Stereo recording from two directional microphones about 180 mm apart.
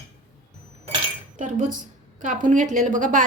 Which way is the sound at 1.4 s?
45° right (ahead or behind).